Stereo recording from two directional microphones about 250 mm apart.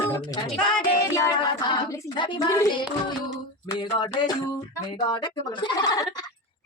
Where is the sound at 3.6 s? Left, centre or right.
Centre.